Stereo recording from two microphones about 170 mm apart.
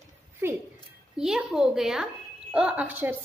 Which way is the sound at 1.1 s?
5° right (ahead or behind).